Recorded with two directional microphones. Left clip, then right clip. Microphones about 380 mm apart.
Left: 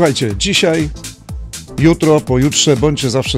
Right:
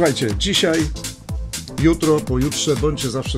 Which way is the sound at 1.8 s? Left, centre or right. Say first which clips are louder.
Left 5 dB; left.